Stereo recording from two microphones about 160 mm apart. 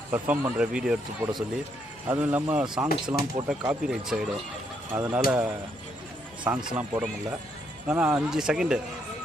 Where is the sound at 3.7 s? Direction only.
5° right (ahead or behind).